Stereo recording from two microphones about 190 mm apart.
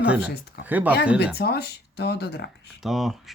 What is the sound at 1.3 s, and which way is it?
Speech, 55° left (ahead or behind).